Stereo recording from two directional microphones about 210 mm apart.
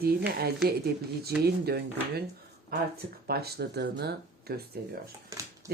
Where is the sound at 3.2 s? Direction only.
50° right (ahead or behind).